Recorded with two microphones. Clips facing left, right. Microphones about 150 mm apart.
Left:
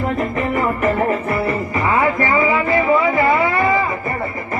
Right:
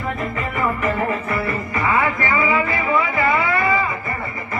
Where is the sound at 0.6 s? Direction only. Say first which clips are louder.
Left 1 dB; 90° left.